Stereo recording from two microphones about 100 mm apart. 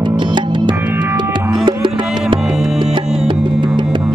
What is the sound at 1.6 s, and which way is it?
Music, 50° right (ahead or behind).